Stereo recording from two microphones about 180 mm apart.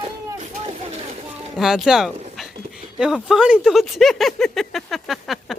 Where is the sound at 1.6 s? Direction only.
Centre (ahead or behind).